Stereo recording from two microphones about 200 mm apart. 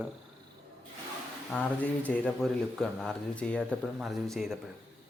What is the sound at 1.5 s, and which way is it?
Speech, 5° left (ahead or behind).